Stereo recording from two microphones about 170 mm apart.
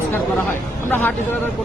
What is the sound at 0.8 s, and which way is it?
Speech, 10° left (ahead or behind).